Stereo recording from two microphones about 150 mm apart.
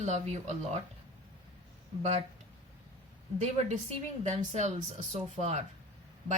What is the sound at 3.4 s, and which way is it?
Speech, 50° right (ahead or behind).